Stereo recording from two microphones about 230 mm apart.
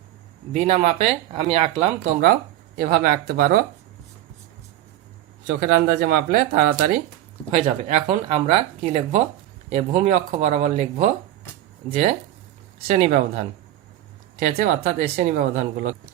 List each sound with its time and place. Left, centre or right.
0.5 s speech: right
5.5 s speech: right
7.5 s speech: right
14.4 s speech: right